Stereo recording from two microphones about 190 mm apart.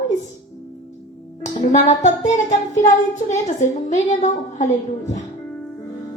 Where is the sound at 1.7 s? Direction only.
40° left (ahead or behind).